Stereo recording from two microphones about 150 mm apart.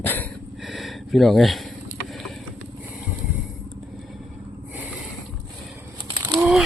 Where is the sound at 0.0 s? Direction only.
10° left (ahead or behind).